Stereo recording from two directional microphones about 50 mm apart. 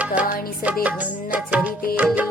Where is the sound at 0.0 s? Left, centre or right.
Right.